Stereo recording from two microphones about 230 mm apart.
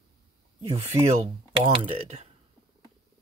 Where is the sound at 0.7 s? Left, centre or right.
Right.